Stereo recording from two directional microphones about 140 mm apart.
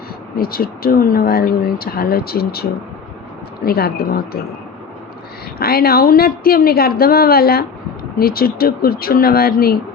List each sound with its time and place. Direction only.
0.3 s speech: 90° left
5.5 s speech: 90° left